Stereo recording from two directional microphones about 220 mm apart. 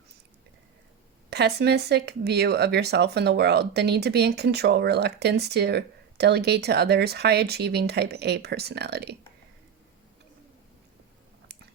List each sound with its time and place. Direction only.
1.3 s speech: 50° right (ahead or behind)